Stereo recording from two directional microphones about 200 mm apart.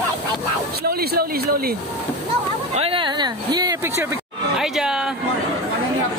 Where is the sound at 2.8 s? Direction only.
25° right (ahead or behind).